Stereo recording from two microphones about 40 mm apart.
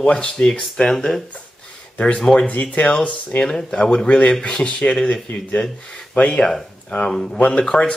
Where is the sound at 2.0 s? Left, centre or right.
Left.